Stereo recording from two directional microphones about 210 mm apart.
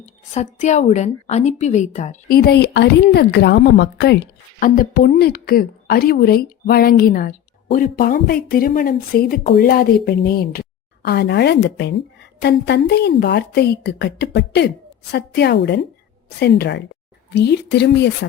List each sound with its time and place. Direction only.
0.0 s a woman's voice: 35° left (ahead or behind); by 4.2 s 55° left (ahead or behind)
4.6 s a woman's voice: 45° left (ahead or behind)